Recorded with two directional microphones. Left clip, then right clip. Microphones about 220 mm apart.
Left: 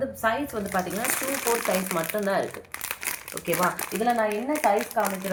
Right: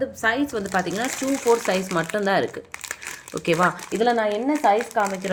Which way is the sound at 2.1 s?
50° right (ahead or behind).